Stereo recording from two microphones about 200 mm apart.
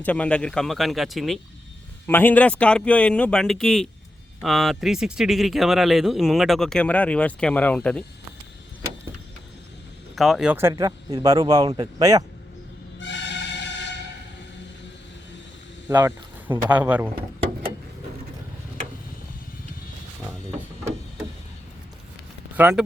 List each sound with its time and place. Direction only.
0.0 s speech: 5° left (ahead or behind)
10.2 s speech: centre (ahead or behind); by 12.2 s 20° right (ahead or behind)
13.0 s music: 65° left (ahead or behind)
15.9 s speech: 10° right (ahead or behind)
22.5 s speech: 10° right (ahead or behind)